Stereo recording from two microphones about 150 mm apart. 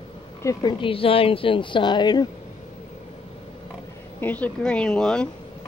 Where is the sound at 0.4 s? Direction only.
25° left (ahead or behind).